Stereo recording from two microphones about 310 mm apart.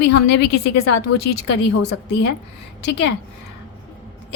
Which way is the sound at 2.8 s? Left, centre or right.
Left.